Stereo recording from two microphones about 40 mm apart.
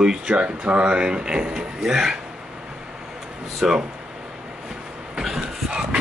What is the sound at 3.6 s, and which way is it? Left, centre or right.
Speech, centre.